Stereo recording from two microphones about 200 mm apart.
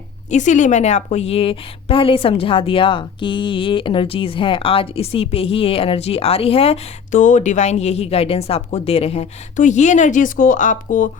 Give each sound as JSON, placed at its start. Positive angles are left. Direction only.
{"t": 0.3, "sound": "a woman's voice", "side_deg": 35}